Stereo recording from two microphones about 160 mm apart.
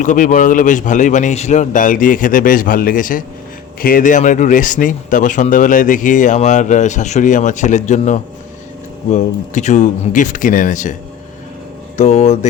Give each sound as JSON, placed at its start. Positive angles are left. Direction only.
{"t": 0.0, "sound": "a man's voice", "side_deg": 55}
{"t": 11.9, "sound": "speech", "side_deg": 45}